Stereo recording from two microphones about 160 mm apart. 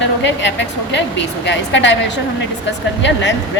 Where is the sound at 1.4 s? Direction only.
90° left.